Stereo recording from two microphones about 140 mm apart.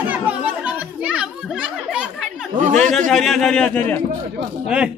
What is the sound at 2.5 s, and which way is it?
Speech, 65° right (ahead or behind).